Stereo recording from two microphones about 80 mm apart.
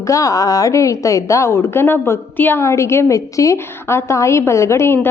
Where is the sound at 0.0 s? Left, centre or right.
Left.